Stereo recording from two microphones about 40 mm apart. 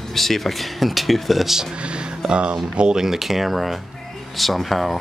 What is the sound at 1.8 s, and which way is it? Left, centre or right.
Speech, right.